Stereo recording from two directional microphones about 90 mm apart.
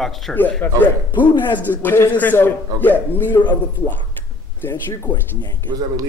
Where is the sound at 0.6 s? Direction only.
25° left (ahead or behind).